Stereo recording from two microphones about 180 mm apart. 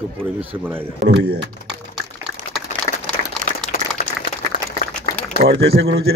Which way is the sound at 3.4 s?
50° right (ahead or behind).